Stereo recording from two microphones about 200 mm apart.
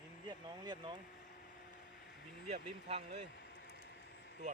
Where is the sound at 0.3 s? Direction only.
20° right (ahead or behind).